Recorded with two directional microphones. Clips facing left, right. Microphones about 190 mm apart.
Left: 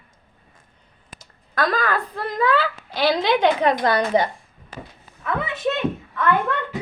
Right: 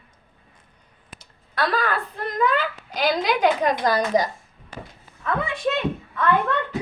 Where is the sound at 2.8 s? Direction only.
30° left (ahead or behind).